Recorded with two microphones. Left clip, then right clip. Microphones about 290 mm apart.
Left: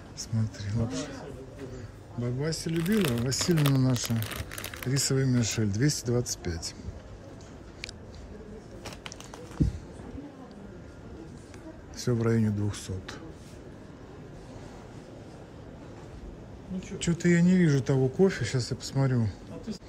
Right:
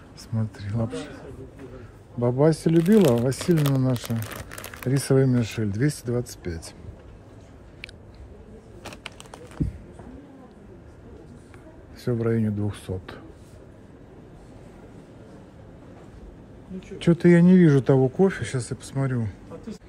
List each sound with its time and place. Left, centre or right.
0.2 s speech: centre
2.2 s speech: centre
12.0 s speech: centre
17.0 s speech: centre